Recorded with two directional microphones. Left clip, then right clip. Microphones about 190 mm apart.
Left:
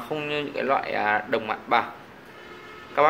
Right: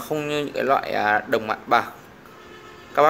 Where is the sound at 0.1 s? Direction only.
50° right (ahead or behind).